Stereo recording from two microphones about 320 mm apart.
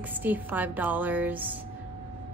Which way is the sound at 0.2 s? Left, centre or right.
Centre.